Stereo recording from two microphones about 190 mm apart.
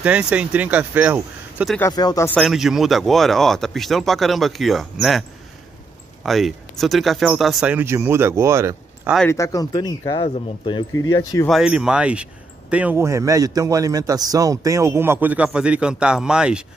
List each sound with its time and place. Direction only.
0.0 s speech: 5° right (ahead or behind)
1.8 s speech: 20° left (ahead or behind)
2.2 s speech: centre (ahead or behind)
6.2 s speech: centre (ahead or behind)
9.3 s speech: 15° left (ahead or behind)
11.4 s speech: 5° right (ahead or behind)